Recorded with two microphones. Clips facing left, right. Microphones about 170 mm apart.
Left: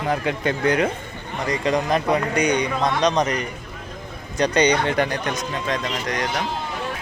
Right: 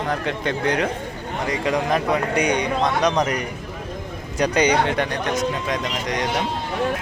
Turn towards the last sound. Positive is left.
turn(degrees=-20)  # may be behind; listen again after turning